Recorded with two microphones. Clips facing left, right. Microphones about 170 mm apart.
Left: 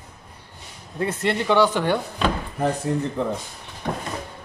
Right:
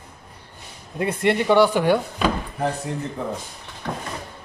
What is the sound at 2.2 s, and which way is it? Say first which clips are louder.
Drawer open or close: left 2 dB; 5° right (ahead or behind).